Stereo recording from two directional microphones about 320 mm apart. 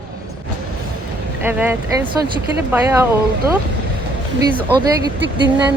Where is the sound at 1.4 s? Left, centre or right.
Centre.